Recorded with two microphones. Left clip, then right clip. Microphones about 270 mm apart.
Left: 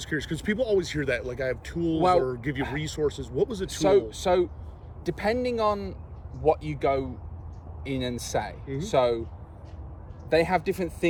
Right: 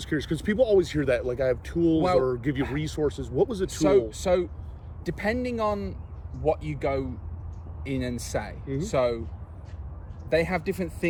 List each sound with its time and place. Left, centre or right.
0.0 s speech: centre
3.7 s speech: centre
10.2 s speech: centre